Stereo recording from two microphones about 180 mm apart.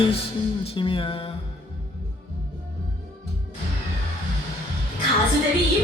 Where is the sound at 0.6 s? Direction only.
30° left (ahead or behind).